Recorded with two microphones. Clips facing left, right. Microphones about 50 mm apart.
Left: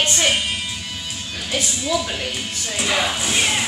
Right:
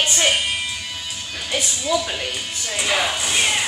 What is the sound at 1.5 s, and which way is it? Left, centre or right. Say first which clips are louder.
Speech: even; centre.